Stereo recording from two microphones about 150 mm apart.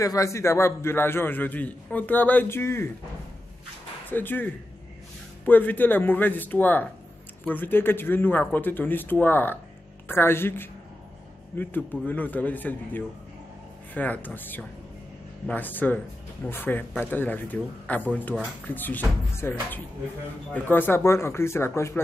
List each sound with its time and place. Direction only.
0.0 s a man's voice: 20° left (ahead or behind)
4.1 s a man's voice: 15° left (ahead or behind)